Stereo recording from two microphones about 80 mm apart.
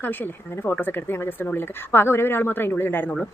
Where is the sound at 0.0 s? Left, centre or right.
Left.